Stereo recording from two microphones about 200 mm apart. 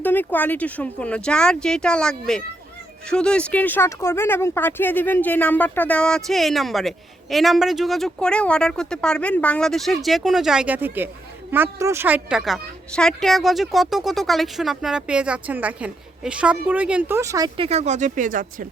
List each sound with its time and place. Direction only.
0.0 s speech: 10° left (ahead or behind); by 17.7 s 20° right (ahead or behind)
17.7 s speech: 35° right (ahead or behind)